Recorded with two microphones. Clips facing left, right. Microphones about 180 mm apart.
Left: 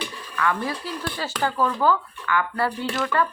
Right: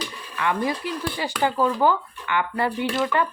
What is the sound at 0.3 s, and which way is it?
Speech, 20° right (ahead or behind).